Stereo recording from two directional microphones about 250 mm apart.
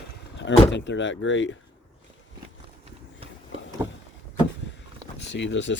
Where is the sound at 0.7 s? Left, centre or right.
Left.